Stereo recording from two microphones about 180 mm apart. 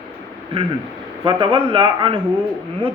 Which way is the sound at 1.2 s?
30° right (ahead or behind).